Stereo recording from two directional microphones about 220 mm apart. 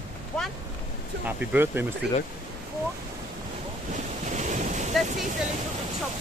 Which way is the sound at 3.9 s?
35° right (ahead or behind).